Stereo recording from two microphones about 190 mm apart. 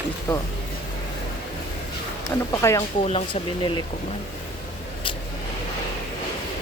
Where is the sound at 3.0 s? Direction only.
30° left (ahead or behind).